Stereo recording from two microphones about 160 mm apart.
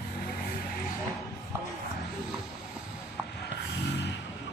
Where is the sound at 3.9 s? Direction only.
90° left.